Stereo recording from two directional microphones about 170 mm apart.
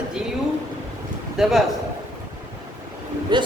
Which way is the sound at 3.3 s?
25° right (ahead or behind).